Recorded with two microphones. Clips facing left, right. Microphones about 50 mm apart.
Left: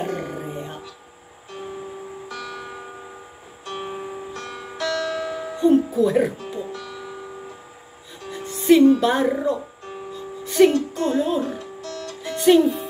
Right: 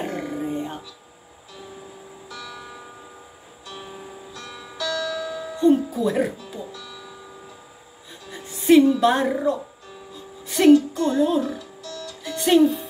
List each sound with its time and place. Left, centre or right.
0.1 s music: left
0.4 s music: centre
2.2 s music: left
5.6 s speech: centre
6.3 s music: left
8.5 s music: centre
9.0 s speech: centre
10.1 s music: centre
10.7 s music: left
12.4 s speech: centre